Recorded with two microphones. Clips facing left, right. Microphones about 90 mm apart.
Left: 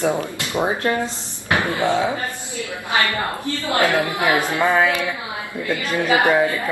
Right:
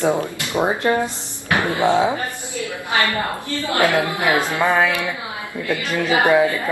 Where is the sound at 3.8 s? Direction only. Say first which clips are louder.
Right 1 dB; 20° right (ahead or behind).